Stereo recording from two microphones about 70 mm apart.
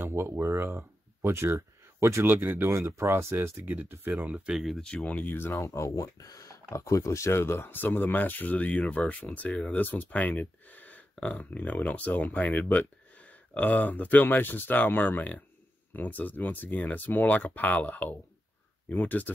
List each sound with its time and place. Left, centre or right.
0.0 s speech: right
2.7 s speech: right
3.1 s speech: right
4.6 s speech: centre
4.8 s speech: centre
5.2 s speech: left
5.6 s speech: left